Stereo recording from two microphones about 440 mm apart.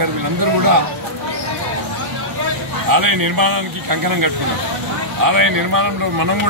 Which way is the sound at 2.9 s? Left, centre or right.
Right.